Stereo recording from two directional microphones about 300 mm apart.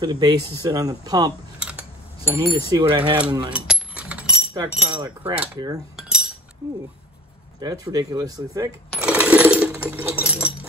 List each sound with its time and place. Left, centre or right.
0.0 s speech: centre
3.5 s speech: centre
5.9 s cutlery: centre
7.6 s speech: centre
8.9 s coin: centre